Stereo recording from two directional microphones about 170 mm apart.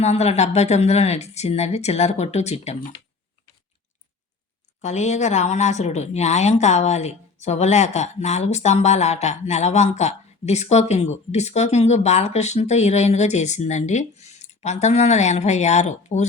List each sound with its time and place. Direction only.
0.0 s speech: 40° left (ahead or behind)
4.8 s speech: 40° left (ahead or behind)